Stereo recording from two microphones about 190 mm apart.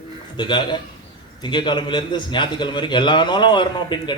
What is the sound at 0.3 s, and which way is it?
A man's voice, 25° left (ahead or behind).